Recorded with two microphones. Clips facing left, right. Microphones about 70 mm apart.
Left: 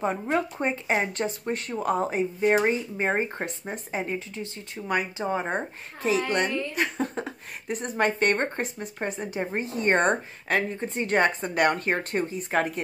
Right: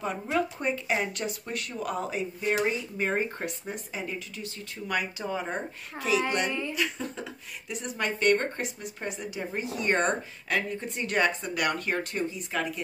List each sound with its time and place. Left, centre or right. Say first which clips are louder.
0.0 s speech: left 3 dB; left
6.7 s speech: left 4 dB; left